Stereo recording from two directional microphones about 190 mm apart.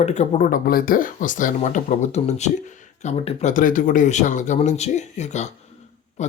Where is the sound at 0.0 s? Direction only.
35° left (ahead or behind).